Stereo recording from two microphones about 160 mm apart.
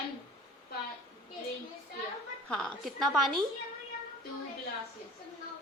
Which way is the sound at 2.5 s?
5° left (ahead or behind).